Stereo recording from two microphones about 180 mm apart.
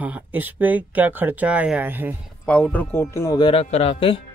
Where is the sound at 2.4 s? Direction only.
5° left (ahead or behind); by 4.2 s 30° left (ahead or behind).